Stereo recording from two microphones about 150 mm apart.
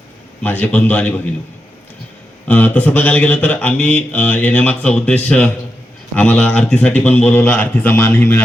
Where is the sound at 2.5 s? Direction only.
10° left (ahead or behind).